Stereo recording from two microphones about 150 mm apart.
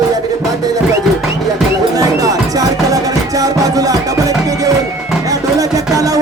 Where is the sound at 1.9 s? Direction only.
25° right (ahead or behind).